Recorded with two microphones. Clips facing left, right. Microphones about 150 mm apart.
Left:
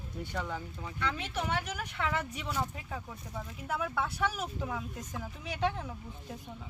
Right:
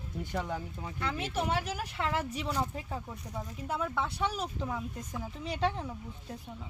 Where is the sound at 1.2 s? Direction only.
35° right (ahead or behind).